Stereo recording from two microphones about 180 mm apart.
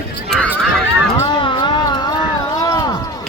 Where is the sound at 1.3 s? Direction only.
25° left (ahead or behind).